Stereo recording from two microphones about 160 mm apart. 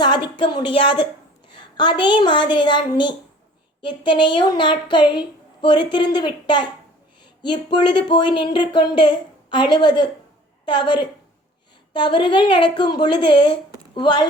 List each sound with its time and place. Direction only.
0.0 s speech: 30° left (ahead or behind)